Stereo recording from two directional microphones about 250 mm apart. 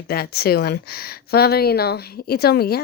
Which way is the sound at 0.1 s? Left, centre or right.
Left.